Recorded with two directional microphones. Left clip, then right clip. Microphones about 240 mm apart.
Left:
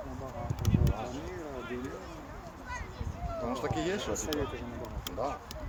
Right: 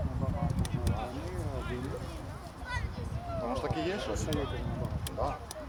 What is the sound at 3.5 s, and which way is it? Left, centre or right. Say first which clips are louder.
Speech: left 1 dB; left.